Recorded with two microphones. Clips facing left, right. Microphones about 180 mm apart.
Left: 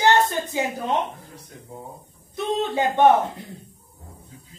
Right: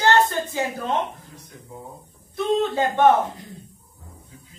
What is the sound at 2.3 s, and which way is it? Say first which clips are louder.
Speech: right 3 dB; 20° left (ahead or behind).